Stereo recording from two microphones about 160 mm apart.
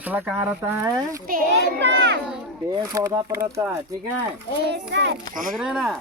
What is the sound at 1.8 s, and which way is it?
Speech, 90° right.